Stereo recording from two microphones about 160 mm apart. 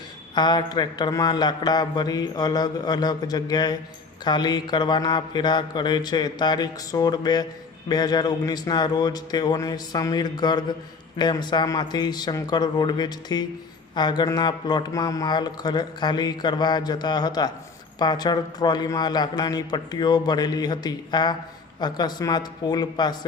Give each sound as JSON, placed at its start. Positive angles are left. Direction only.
{"t": 0.3, "sound": "a man's voice", "side_deg": 25}